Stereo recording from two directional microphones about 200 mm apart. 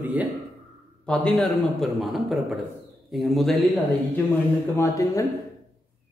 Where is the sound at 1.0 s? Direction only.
5° left (ahead or behind).